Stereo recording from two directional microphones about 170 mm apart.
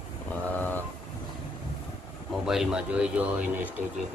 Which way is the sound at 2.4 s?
5° right (ahead or behind).